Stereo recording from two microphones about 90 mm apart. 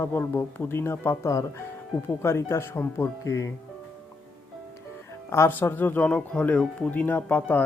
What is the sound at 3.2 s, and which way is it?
Speech, 35° left (ahead or behind).